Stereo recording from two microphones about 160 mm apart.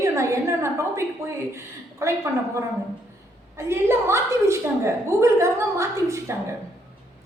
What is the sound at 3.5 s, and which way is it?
A woman's voice, 15° right (ahead or behind).